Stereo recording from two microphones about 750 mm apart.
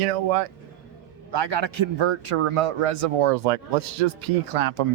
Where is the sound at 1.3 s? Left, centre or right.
Right.